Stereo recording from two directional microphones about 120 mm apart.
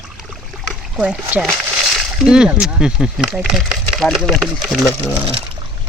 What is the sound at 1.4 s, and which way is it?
Speech, centre (ahead or behind).